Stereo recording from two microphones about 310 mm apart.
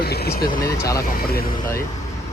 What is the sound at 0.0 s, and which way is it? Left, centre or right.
Vehicle, left.